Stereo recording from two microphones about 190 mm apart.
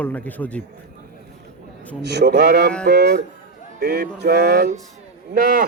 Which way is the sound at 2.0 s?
60° right (ahead or behind).